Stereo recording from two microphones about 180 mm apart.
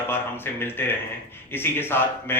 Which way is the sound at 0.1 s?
10° left (ahead or behind).